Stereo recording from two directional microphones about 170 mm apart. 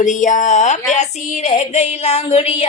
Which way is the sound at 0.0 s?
45° left (ahead or behind).